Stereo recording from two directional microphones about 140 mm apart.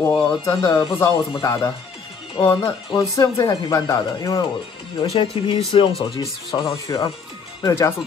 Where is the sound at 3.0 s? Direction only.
25° left (ahead or behind).